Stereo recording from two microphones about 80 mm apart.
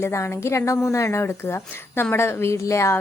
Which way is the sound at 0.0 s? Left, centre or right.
Left.